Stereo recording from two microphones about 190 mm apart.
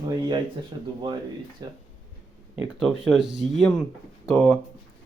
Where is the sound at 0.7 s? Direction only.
25° right (ahead or behind).